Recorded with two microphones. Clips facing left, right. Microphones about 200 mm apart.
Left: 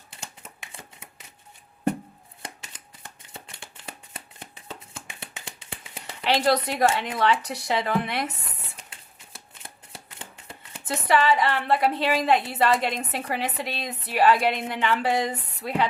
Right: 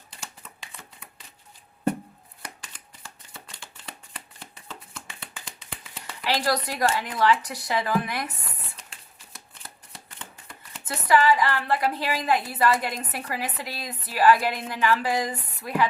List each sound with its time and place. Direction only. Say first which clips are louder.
0.7 s shuffling cards: left 2 dB; 25° left (ahead or behind)
2.4 s shuffling cards: left 2 dB; 20° left (ahead or behind)
4.9 s a sound: left 1 dB; 25° left (ahead or behind)
9.1 s shuffling cards: left 1 dB; 25° left (ahead or behind)
10.2 s speech: left 1 dB; 25° left (ahead or behind)